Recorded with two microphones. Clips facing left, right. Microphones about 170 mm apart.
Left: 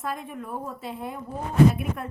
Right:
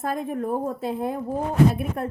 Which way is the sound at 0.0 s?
40° right (ahead or behind).